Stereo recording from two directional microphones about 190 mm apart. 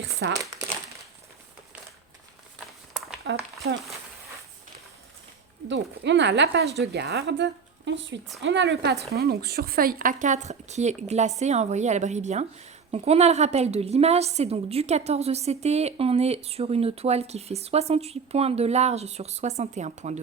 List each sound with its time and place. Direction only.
0.2 s a woman's voice: 65° right (ahead or behind)
3.2 s a woman's voice: 60° right (ahead or behind)
5.6 s a woman's voice: 70° right (ahead or behind); by 20.2 s 35° right (ahead or behind)